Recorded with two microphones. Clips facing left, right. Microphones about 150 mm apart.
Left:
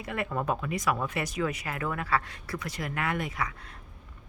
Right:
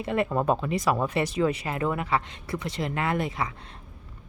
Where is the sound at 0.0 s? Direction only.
25° right (ahead or behind).